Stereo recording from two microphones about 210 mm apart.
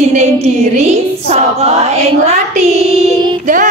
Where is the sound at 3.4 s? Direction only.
40° right (ahead or behind).